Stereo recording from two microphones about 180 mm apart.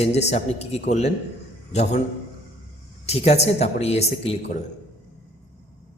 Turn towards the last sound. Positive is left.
turn(degrees=35)  # may be behind; listen again after turning